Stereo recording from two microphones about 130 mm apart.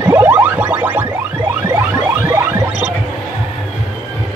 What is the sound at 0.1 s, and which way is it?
Music, 10° right (ahead or behind).